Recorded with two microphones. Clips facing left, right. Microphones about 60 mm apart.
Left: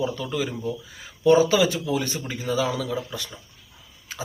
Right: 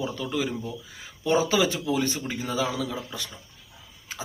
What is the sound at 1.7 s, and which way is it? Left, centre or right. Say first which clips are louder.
A man's voice: even; right.